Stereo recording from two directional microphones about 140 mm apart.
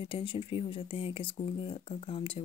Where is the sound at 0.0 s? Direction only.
40° left (ahead or behind).